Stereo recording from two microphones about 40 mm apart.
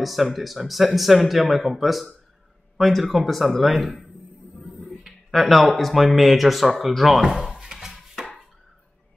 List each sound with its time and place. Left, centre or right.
0.0 s speech: centre
4.6 s a sound: centre
5.3 s speech: centre
7.6 s dishes: centre